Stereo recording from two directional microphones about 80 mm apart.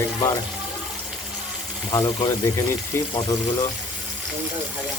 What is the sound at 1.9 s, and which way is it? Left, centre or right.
Speech, left.